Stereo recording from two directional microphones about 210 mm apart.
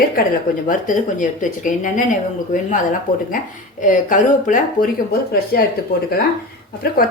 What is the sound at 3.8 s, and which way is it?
Speech, 40° left (ahead or behind).